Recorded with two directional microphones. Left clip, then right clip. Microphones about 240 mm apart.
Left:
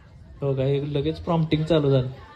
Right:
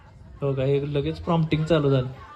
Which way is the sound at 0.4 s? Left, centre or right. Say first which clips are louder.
Right 1 dB; left.